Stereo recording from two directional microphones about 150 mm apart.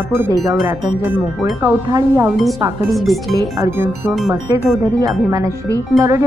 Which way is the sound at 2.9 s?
Centre (ahead or behind).